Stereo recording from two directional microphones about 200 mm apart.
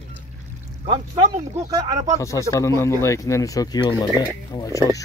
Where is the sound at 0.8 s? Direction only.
30° right (ahead or behind).